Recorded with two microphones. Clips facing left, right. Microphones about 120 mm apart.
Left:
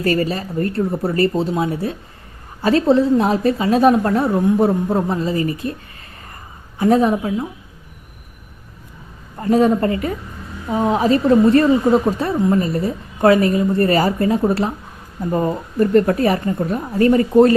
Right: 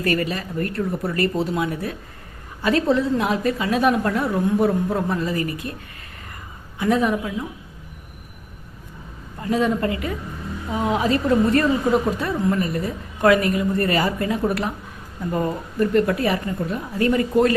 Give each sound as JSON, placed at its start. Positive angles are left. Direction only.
{"t": 0.0, "sound": "a woman's voice", "side_deg": 30}
{"t": 6.7, "sound": "a woman's voice", "side_deg": 35}
{"t": 9.4, "sound": "a woman's voice", "side_deg": 40}